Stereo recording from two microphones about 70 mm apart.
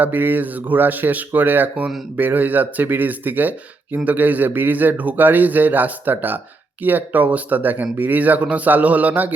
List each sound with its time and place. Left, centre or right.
0.0 s speech: right